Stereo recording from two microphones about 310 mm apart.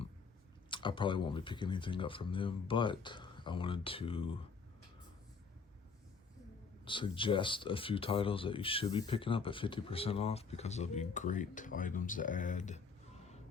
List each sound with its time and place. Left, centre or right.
0.7 s speech: centre
6.8 s speech: centre